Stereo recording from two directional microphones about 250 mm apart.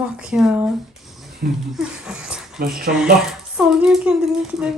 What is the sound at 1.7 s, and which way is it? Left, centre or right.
Speech, centre.